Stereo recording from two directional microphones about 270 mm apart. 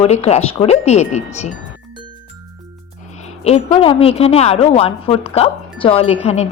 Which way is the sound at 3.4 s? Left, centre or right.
Left.